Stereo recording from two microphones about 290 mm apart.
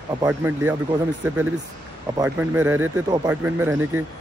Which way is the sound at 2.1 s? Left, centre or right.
Centre.